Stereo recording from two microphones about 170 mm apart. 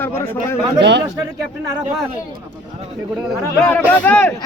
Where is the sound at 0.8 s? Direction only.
80° right.